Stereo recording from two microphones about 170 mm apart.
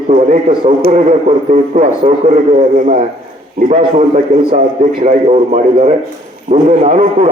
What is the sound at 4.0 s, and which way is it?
A man's voice, 50° right (ahead or behind).